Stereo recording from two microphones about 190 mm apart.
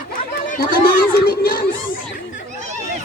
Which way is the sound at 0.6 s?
50° left (ahead or behind).